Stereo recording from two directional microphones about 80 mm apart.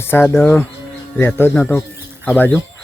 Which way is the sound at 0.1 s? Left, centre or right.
Left.